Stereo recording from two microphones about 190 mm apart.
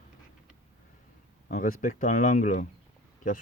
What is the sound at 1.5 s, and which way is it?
Speech, 45° left (ahead or behind).